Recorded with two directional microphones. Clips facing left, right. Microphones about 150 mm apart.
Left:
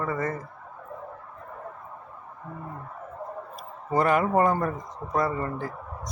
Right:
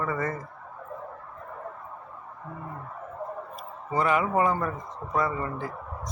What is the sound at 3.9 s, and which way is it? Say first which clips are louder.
Speech: left 2 dB; 45° left (ahead or behind).